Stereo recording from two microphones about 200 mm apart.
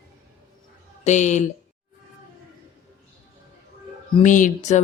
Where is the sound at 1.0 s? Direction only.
35° left (ahead or behind).